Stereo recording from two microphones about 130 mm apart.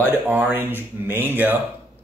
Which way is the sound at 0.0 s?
15° right (ahead or behind).